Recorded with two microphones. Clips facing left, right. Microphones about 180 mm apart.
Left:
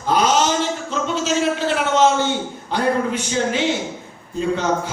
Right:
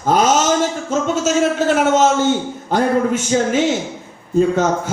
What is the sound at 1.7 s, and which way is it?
A man's voice, 45° right (ahead or behind).